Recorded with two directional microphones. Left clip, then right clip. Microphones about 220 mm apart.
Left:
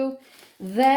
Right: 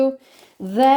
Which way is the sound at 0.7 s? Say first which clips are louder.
Right 4 dB; 35° right (ahead or behind).